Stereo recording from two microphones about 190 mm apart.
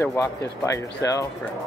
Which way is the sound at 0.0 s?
15° left (ahead or behind).